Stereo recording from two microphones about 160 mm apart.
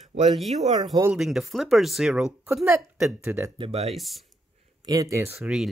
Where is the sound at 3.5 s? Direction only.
35° right (ahead or behind).